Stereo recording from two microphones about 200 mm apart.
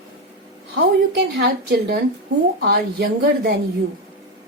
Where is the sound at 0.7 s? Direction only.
55° right (ahead or behind).